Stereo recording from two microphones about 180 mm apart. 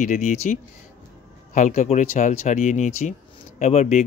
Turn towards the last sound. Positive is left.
turn(degrees=40)  # may be behind; listen again after turning